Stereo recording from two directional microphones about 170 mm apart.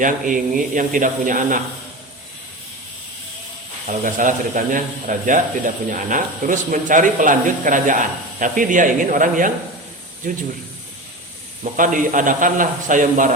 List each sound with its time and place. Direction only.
0.0 s speech: 50° right (ahead or behind)
4.0 s speech: 50° right (ahead or behind)
11.6 s speech: 50° right (ahead or behind)